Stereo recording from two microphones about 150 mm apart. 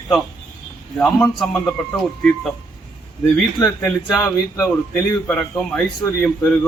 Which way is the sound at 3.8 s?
5° left (ahead or behind).